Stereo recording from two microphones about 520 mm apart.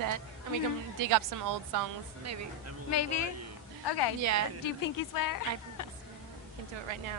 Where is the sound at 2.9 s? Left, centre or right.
Left.